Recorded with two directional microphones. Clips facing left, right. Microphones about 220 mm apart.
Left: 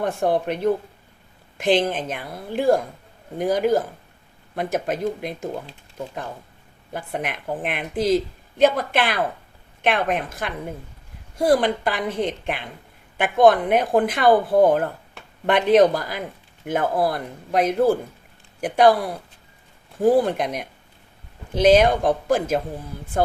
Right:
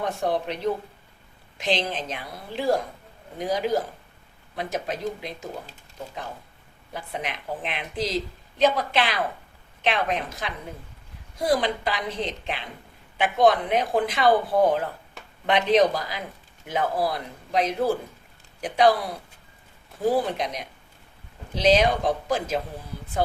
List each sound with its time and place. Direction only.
0.0 s speech: 50° left (ahead or behind)
6.9 s speech: 50° left (ahead or behind)
20.1 s speech: 50° left (ahead or behind)